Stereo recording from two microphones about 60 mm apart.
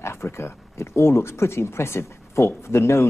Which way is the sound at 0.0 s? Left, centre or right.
Left.